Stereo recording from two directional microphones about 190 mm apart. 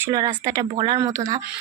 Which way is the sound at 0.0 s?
20° right (ahead or behind).